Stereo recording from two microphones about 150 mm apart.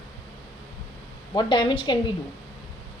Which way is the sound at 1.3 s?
30° left (ahead or behind).